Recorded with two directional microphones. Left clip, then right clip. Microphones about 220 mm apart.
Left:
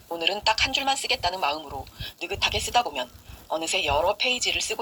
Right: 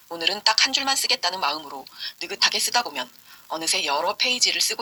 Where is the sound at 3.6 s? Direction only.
50° right (ahead or behind).